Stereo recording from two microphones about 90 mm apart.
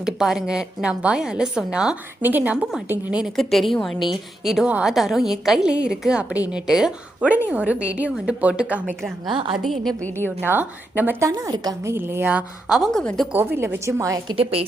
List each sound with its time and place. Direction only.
0.0 s a woman's voice: 5° right (ahead or behind)
2.2 s a woman's voice: 20° right (ahead or behind)
3.3 s a woman's voice: centre (ahead or behind); by 8.8 s 15° right (ahead or behind)
9.2 s a woman's voice: 60° right (ahead or behind)
9.6 s a woman's voice: centre (ahead or behind)
10.0 s a woman's voice: 20° left (ahead or behind)
10.5 s a woman's voice: 20° right (ahead or behind)
11.2 s a woman's voice: 40° right (ahead or behind)
11.9 s a woman's voice: 25° right (ahead or behind)
12.9 s a woman's voice: 5° left (ahead or behind)
13.3 s a woman's voice: 25° right (ahead or behind)
13.8 s a woman's voice: 35° right (ahead or behind)